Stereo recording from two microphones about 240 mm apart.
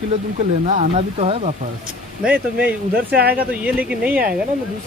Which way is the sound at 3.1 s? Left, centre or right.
Right.